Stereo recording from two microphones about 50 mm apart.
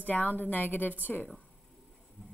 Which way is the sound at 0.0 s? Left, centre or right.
Left.